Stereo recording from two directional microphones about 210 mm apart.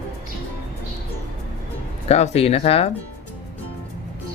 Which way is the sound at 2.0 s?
30° left (ahead or behind).